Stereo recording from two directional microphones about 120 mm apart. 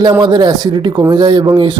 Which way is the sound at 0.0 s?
35° right (ahead or behind).